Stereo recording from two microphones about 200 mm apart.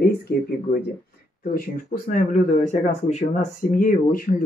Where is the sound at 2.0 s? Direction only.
35° left (ahead or behind).